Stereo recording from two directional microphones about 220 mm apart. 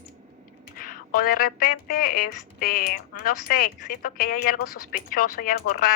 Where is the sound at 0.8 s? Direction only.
40° left (ahead or behind).